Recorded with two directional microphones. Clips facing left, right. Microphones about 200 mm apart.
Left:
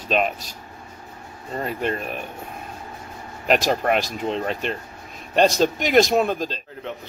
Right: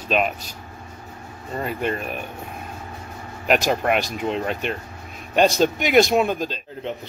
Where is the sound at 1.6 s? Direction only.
Centre (ahead or behind).